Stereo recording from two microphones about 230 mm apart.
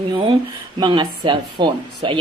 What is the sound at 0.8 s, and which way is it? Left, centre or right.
A woman's voice, right.